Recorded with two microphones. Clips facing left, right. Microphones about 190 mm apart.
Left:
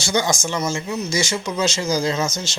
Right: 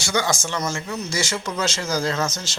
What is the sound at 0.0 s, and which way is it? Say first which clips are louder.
Speech: left 2 dB; 20° left (ahead or behind).